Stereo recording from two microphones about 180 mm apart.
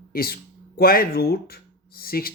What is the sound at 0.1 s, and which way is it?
Speech, 55° left (ahead or behind).